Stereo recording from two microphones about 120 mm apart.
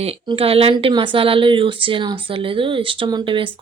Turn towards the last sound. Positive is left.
turn(degrees=-45)  # may be behind; listen again after turning